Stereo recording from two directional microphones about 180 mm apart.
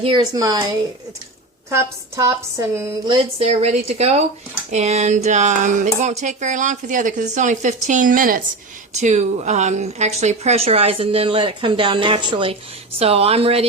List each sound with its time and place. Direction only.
0.0 s a woman's voice: 25° right (ahead or behind)
1.7 s speech: 15° right (ahead or behind); by 13.7 s 35° right (ahead or behind)